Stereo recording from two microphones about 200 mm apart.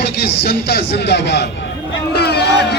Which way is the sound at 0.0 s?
55° left (ahead or behind).